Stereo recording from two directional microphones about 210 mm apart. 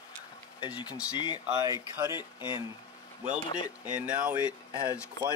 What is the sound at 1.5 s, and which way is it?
Speech, 20° right (ahead or behind).